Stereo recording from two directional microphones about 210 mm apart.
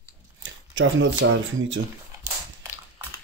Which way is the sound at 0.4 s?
60° right (ahead or behind).